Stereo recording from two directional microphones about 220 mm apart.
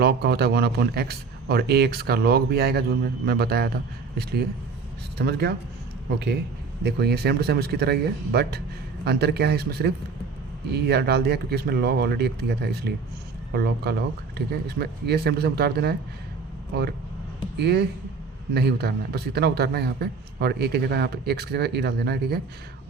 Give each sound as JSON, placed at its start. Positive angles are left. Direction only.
{"t": 0.0, "sound": "a man's voice", "side_deg": -45}
{"t": 6.8, "sound": "a man's voice", "side_deg": -45}